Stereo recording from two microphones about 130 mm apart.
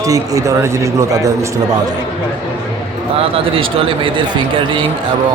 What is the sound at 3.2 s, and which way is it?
Speech, 45° right (ahead or behind).